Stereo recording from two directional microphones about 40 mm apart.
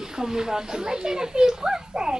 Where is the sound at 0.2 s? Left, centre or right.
Centre.